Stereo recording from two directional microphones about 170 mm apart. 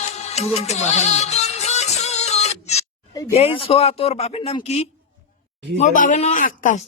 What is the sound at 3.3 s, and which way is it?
A man's voice, 35° left (ahead or behind).